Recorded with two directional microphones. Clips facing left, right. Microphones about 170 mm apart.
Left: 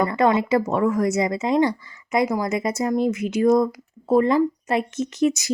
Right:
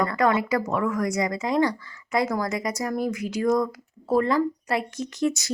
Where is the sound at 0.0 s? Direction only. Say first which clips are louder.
Left 3 dB; 25° left (ahead or behind).